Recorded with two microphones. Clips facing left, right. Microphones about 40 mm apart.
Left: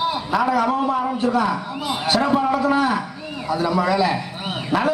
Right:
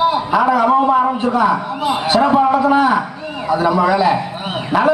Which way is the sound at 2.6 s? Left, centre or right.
Right.